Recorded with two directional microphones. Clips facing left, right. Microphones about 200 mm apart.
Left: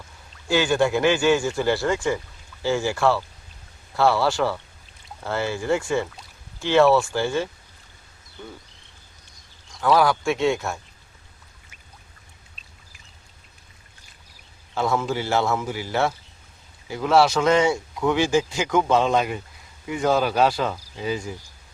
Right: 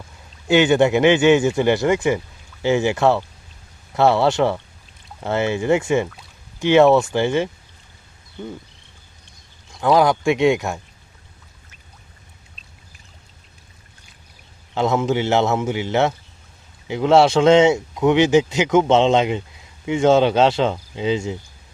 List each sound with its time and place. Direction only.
0.4 s speech: 20° right (ahead or behind)
9.8 s speech: 20° right (ahead or behind)
14.8 s speech: 20° right (ahead or behind)